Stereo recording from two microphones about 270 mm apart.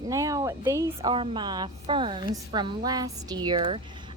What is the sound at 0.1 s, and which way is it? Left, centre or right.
A woman's voice, centre.